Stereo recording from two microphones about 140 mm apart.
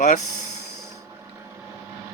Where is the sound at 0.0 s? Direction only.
55° left (ahead or behind).